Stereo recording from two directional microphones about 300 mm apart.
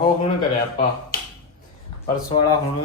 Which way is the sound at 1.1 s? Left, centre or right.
Left.